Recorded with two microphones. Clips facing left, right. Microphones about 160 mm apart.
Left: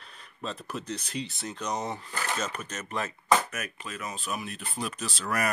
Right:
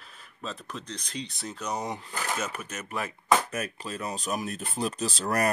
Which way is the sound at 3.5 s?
30° right (ahead or behind).